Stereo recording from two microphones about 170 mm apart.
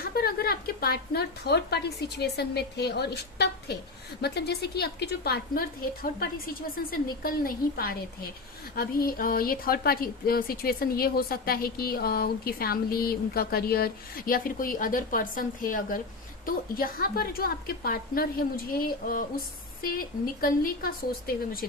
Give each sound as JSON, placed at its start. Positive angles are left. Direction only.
{"t": 0.0, "sound": "a woman's voice", "side_deg": 65}